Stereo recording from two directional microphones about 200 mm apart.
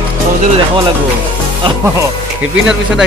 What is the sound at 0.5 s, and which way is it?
Speech, 25° right (ahead or behind).